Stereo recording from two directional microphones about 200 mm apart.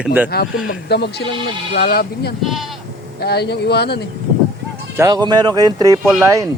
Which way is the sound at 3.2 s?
55° left (ahead or behind).